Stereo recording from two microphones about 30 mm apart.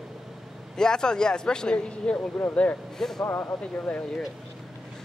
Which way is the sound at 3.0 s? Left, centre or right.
Centre.